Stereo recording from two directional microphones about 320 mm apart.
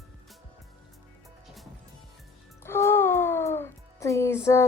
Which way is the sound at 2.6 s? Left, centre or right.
Centre.